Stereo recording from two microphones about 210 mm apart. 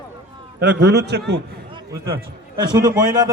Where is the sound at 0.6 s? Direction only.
55° right (ahead or behind).